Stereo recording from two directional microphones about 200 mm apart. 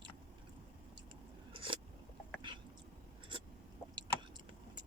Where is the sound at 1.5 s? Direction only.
25° right (ahead or behind).